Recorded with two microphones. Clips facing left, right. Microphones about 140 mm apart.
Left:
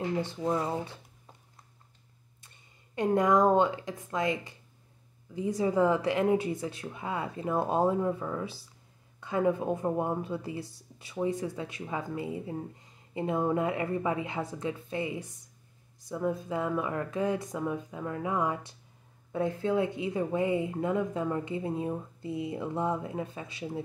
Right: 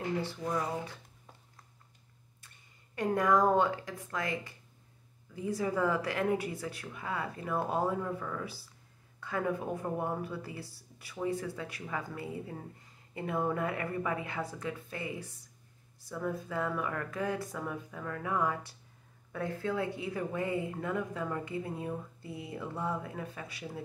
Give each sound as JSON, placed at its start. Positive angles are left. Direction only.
{"t": 0.2, "sound": "speech", "side_deg": 20}
{"t": 3.0, "sound": "speech", "side_deg": 20}